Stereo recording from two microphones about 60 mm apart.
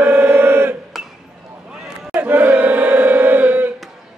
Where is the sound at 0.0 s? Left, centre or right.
Right.